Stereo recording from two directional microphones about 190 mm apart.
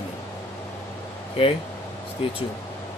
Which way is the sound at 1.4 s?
30° left (ahead or behind).